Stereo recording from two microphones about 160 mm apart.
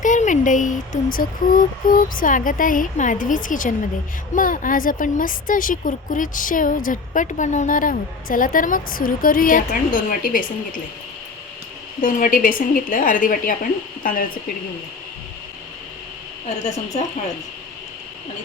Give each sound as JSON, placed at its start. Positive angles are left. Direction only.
{"t": 0.0, "sound": "a woman's voice", "side_deg": 50}
{"t": 12.0, "sound": "a woman's voice", "side_deg": 60}